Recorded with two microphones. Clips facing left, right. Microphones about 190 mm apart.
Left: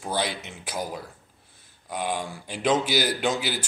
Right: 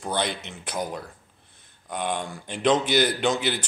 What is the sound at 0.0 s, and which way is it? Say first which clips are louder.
Speech: right 1 dB; 5° left (ahead or behind).